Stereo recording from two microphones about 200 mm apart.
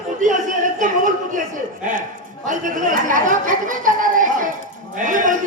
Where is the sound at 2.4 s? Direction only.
40° right (ahead or behind).